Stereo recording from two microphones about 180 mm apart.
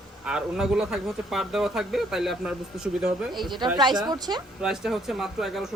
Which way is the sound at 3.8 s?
25° right (ahead or behind).